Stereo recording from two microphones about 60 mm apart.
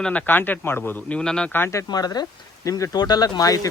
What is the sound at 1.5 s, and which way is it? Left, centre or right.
Speech, left.